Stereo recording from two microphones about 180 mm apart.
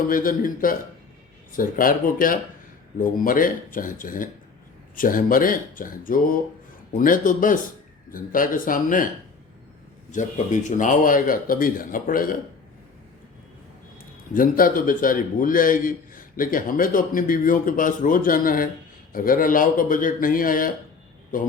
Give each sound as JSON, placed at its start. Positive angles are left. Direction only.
{"t": 0.1, "sound": "a man's voice", "side_deg": 50}
{"t": 10.1, "sound": "a man's voice", "side_deg": 45}
{"t": 14.3, "sound": "a man's voice", "side_deg": 50}